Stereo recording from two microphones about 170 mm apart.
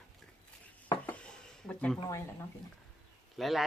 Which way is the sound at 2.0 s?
20° left (ahead or behind).